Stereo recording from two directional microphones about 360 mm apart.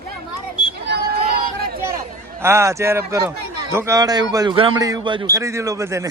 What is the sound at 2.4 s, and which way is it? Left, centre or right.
A man's voice, centre.